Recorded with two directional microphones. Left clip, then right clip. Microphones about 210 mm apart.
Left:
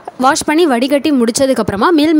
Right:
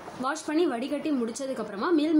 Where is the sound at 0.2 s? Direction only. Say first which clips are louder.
Left 16 dB; 50° left (ahead or behind).